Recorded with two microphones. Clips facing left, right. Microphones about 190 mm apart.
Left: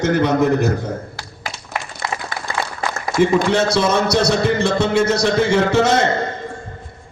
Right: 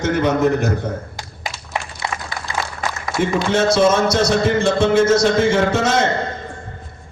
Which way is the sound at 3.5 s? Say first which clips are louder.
Right 2 dB; 65° left (ahead or behind).